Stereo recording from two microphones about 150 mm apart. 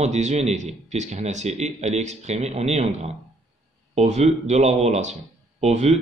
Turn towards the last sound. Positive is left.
turn(degrees=-50)  # may be behind; listen again after turning